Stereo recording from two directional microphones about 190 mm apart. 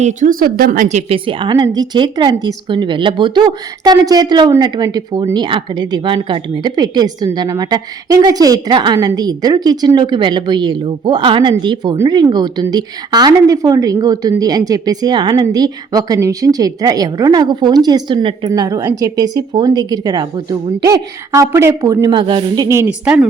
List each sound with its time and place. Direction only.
0.0 s speech: 40° right (ahead or behind); by 23.2 s 5° right (ahead or behind)